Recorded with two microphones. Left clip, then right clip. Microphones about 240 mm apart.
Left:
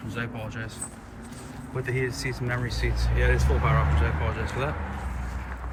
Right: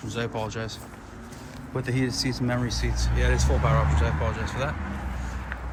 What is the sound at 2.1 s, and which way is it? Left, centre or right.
Speech, right.